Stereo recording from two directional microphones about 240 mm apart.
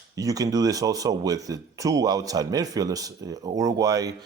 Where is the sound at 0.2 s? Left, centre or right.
Centre.